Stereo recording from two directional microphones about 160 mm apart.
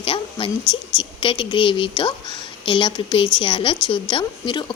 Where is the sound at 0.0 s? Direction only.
35° left (ahead or behind).